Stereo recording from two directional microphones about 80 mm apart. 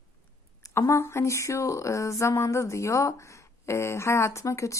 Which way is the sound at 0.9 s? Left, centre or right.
Left.